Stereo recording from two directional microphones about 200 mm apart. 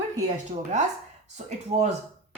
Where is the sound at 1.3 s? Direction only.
35° right (ahead or behind).